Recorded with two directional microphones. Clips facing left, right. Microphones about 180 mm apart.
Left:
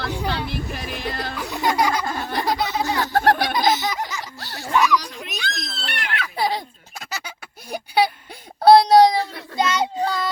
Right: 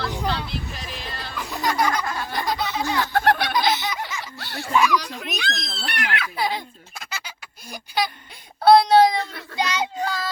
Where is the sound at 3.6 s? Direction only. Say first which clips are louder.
Left 2 dB; 40° left (ahead or behind).